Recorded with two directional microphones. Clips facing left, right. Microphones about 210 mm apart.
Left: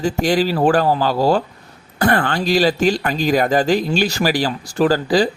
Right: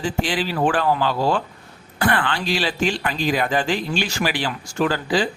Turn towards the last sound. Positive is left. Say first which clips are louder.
# left 5 dB
turn(degrees=40)  # may be behind; listen again after turning